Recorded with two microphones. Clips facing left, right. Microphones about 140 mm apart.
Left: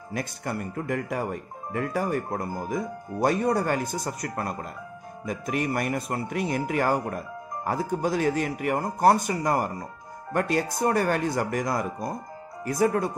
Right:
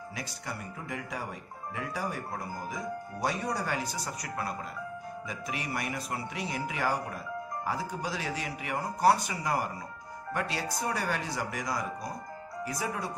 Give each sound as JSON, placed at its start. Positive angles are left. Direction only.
{"t": 0.1, "sound": "speech", "side_deg": 55}